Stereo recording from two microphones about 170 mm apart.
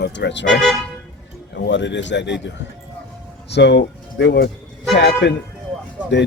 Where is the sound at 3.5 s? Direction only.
90° left.